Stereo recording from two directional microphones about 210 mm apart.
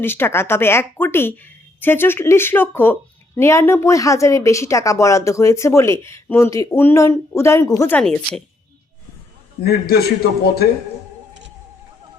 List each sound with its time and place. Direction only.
0.0 s a woman's voice: 10° left (ahead or behind)
9.6 s a man's voice: 50° left (ahead or behind)